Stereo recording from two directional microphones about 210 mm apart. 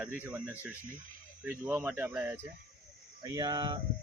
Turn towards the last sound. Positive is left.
turn(degrees=-20)  # may be behind; listen again after turning